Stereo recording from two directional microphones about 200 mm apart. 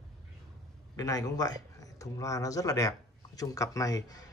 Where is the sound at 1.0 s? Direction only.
15° left (ahead or behind).